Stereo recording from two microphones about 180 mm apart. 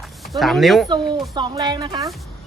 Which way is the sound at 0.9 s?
25° right (ahead or behind).